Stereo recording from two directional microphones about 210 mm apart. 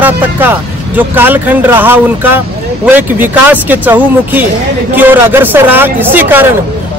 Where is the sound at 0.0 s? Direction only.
10° right (ahead or behind).